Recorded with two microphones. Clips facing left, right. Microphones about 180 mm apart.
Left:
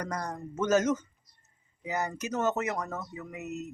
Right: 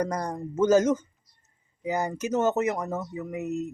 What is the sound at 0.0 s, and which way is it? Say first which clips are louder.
Speech: right 6 dB; 30° right (ahead or behind).